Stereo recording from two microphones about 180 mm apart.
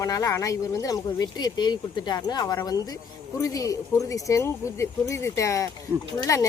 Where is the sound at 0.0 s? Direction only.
20° left (ahead or behind).